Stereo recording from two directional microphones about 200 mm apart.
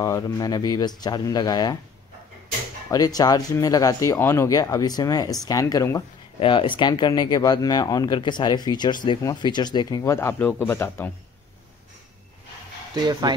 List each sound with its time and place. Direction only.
0.0 s speech: 15° left (ahead or behind)
2.9 s speech: 20° left (ahead or behind)
12.9 s speech: 20° right (ahead or behind)